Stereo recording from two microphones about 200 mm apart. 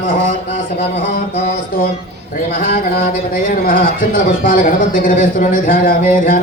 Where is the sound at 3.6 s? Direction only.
45° left (ahead or behind).